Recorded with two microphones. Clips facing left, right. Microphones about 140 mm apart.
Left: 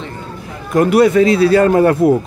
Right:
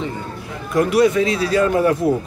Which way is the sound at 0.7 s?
55° left (ahead or behind).